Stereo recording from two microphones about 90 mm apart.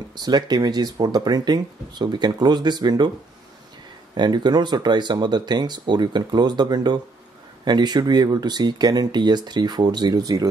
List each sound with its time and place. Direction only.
0.1 s speech: 50° right (ahead or behind)
4.1 s speech: 55° right (ahead or behind)